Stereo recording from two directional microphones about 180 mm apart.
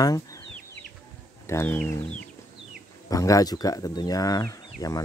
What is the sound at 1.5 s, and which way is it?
Speech, 10° left (ahead or behind).